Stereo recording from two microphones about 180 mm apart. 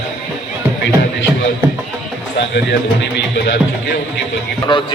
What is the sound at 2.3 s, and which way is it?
Speech, 70° left (ahead or behind).